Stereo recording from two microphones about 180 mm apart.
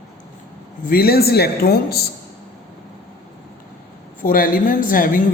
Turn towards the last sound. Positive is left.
turn(degrees=50)  # may be behind; listen again after turning